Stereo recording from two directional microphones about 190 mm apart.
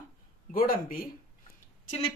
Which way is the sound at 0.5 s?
50° left (ahead or behind).